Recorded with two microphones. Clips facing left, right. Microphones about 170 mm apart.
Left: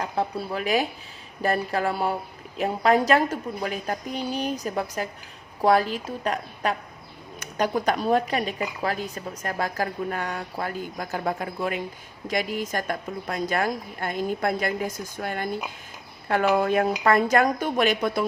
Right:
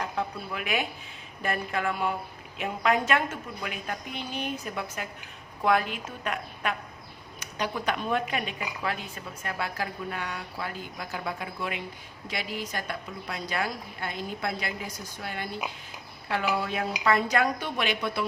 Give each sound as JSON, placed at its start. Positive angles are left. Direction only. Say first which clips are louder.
{"t": 0.0, "sound": "a woman's voice", "louder": "left 5 dB", "side_deg": 35}
{"t": 7.3, "sound": "a woman's voice", "louder": "left 7 dB", "side_deg": 45}